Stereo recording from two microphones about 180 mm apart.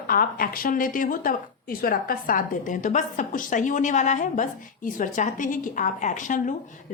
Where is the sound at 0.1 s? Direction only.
50° left (ahead or behind).